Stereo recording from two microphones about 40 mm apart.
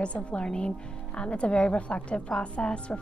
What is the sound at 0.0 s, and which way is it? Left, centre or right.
A woman's voice, left.